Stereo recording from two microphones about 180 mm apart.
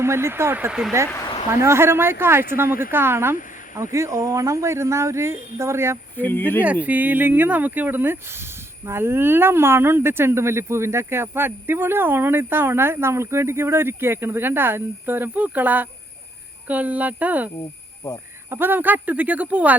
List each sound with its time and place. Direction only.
0.0 s speech: 15° right (ahead or behind)
1.1 s a sound: 20° left (ahead or behind)
1.6 s speech: 15° right (ahead or behind)
6.1 s speech: 10° left (ahead or behind)
6.8 s speech: 10° right (ahead or behind)
18.5 s speech: 10° right (ahead or behind)